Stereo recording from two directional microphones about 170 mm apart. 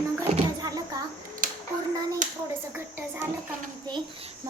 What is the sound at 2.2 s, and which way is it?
Speech, 50° right (ahead or behind).